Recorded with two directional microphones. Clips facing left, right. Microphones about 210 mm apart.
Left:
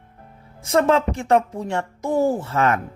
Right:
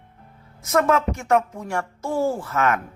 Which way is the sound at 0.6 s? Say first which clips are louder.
Left 2 dB; 30° left (ahead or behind).